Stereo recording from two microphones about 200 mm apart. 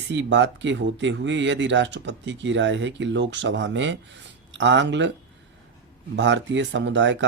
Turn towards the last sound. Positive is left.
turn(degrees=-65)  # may be behind; listen again after turning